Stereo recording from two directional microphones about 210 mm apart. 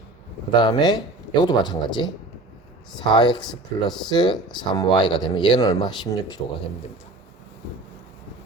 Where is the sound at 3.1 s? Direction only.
20° left (ahead or behind).